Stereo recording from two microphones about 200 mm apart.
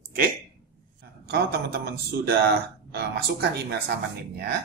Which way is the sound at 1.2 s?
55° right (ahead or behind).